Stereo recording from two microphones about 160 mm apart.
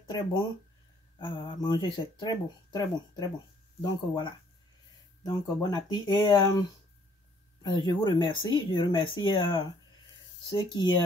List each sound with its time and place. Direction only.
0.1 s speech: 35° left (ahead or behind)
7.7 s speech: 25° left (ahead or behind)